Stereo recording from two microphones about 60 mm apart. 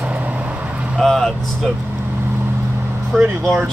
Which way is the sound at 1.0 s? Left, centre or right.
Centre.